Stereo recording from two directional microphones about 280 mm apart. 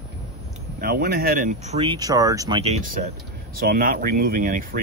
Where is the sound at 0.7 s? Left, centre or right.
Right.